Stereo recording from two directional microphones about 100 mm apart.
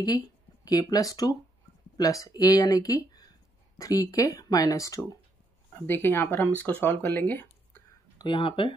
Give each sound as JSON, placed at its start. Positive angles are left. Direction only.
{"t": 0.7, "sound": "speech", "side_deg": 40}
{"t": 5.9, "sound": "speech", "side_deg": 20}
{"t": 8.2, "sound": "speech", "side_deg": 55}